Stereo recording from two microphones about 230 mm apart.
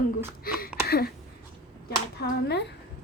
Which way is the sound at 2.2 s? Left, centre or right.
Left.